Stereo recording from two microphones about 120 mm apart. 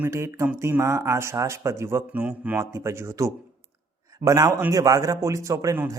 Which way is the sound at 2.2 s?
10° right (ahead or behind).